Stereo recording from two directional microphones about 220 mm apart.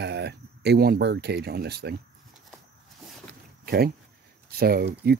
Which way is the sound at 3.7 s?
45° right (ahead or behind).